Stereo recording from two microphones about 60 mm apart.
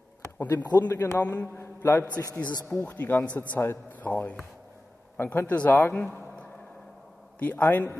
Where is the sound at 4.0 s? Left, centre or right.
Left.